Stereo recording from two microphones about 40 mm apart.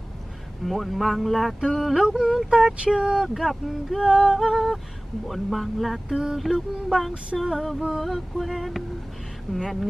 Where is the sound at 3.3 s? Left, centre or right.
Centre.